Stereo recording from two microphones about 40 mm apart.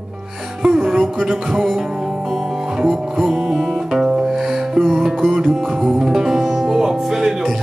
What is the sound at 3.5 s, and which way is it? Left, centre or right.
Music, centre.